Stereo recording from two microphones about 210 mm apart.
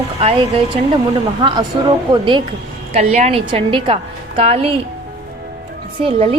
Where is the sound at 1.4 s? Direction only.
20° right (ahead or behind).